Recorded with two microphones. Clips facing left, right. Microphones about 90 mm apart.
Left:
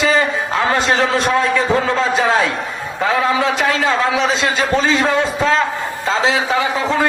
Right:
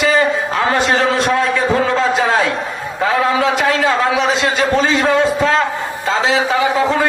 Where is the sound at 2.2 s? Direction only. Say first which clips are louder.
Even; 25° right (ahead or behind).